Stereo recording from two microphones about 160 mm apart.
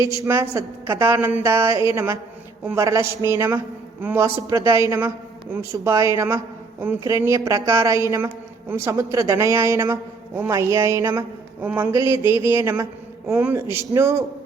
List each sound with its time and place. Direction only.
0.0 s a man's voice: 20° right (ahead or behind)